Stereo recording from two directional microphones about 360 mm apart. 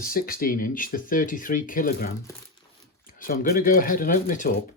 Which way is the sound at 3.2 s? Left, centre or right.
Left.